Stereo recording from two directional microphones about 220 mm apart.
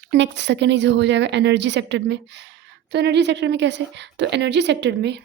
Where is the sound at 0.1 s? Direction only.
50° right (ahead or behind).